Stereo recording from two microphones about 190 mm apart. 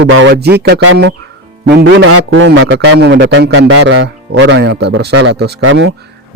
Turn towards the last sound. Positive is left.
turn(degrees=-80)